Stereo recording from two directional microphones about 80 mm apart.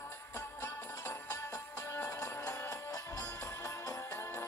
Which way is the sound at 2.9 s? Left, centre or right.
Left.